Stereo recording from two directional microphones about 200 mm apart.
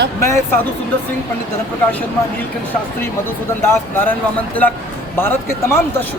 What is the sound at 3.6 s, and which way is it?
Speech, 10° left (ahead or behind).